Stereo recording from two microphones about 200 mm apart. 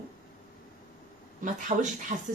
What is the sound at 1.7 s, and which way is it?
Speech, 30° right (ahead or behind).